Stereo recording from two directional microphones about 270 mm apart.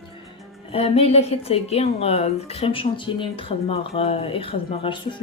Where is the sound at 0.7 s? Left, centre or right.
Left.